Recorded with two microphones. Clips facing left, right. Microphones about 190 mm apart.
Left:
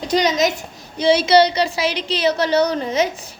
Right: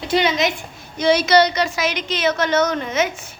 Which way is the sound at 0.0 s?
40° left (ahead or behind).